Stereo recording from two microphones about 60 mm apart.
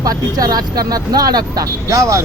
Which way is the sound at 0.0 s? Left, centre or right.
Right.